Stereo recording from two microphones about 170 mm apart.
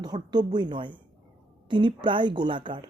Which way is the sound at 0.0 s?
25° right (ahead or behind).